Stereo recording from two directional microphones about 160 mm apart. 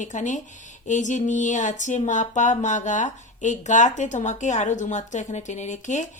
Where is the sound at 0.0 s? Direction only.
50° left (ahead or behind).